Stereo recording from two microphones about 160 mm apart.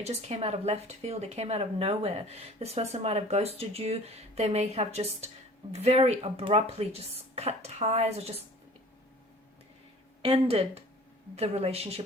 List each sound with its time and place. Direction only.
0.0 s speech: 40° right (ahead or behind)
10.2 s speech: 35° right (ahead or behind)